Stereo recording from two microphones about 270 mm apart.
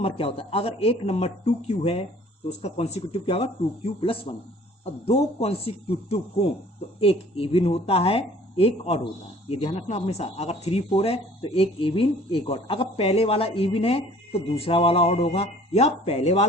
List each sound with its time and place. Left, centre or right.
0.0 s speech: left